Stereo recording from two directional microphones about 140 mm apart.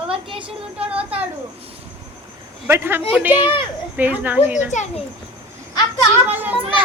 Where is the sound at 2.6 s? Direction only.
15° right (ahead or behind).